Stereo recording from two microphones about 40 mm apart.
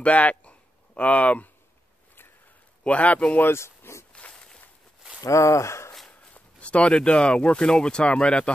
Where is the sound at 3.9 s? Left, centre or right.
Left.